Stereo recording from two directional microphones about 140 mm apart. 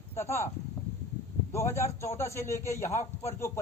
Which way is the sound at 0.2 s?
20° left (ahead or behind).